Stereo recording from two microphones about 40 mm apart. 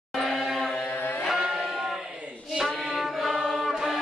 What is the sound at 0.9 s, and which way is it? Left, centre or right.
Music, left.